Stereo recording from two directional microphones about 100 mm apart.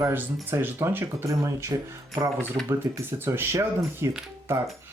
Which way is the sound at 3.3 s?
25° right (ahead or behind).